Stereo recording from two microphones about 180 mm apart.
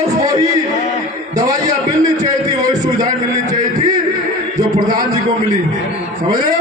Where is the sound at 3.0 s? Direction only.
40° right (ahead or behind).